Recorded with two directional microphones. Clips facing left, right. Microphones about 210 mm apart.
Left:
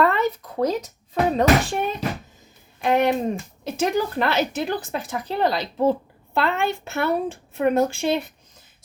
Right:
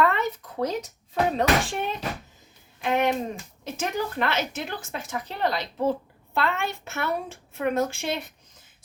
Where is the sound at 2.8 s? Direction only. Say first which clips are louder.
Left 4 dB; 35° left (ahead or behind).